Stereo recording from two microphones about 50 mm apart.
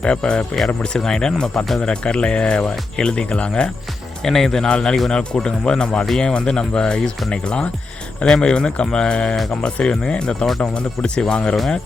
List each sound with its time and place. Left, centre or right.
0.0 s speech: centre
4.2 s speech: centre